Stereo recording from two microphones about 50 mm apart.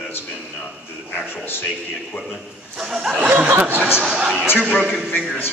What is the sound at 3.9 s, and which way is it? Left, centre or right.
A man's voice, centre.